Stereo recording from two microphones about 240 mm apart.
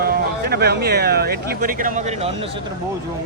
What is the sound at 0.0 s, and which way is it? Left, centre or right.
Speech, right.